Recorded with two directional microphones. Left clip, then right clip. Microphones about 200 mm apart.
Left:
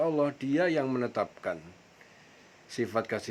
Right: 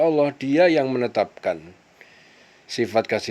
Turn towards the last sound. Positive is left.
turn(degrees=-30)  # may be behind; listen again after turning